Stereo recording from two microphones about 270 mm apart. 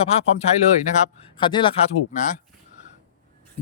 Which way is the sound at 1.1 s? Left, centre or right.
Centre.